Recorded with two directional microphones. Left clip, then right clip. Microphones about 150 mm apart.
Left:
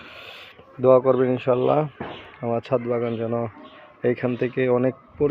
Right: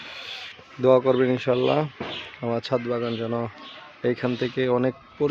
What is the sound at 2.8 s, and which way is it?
Speech, 5° right (ahead or behind).